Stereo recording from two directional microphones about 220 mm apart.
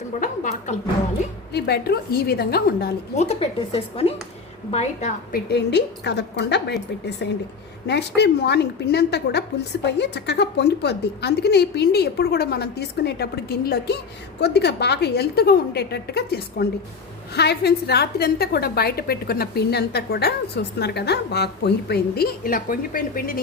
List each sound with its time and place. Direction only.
0.2 s a woman's voice: 35° left (ahead or behind)
1.5 s a woman's voice: 45° left (ahead or behind)
3.2 s a woman's voice: 30° left (ahead or behind)
5.5 s a woman's voice: 50° left (ahead or behind)